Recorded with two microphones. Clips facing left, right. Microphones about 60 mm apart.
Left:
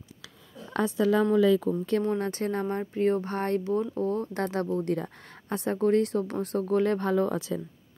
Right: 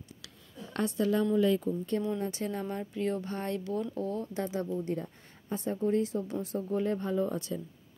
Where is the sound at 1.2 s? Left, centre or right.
Left.